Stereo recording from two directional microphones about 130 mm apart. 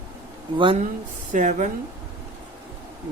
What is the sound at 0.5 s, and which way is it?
Speech, 40° right (ahead or behind).